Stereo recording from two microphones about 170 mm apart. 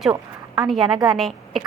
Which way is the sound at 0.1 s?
20° right (ahead or behind).